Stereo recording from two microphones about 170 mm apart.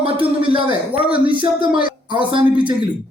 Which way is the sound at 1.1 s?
30° right (ahead or behind).